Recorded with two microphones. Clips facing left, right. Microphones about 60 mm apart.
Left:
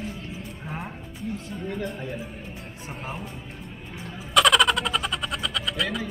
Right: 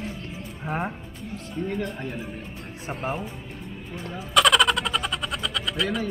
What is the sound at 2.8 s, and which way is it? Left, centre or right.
Speech, right.